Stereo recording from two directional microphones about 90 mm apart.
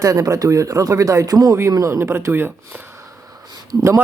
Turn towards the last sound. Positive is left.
turn(degrees=-40)  # may be behind; listen again after turning